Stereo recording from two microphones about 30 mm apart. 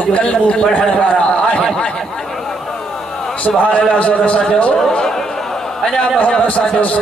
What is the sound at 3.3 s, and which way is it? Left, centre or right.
Speech, left.